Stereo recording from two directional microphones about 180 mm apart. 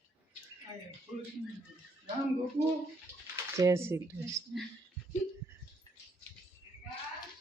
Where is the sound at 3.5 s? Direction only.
15° right (ahead or behind).